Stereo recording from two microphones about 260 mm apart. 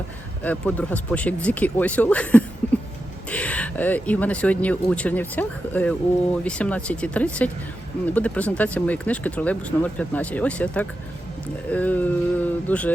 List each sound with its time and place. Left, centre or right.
0.4 s speech: centre
2.6 s a sound: centre
3.2 s speech: centre